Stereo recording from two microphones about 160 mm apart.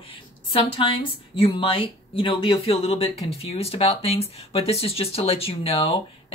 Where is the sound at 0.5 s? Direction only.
35° left (ahead or behind).